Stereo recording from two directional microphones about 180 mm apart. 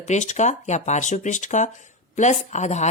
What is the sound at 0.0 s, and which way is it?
Speech, 40° left (ahead or behind).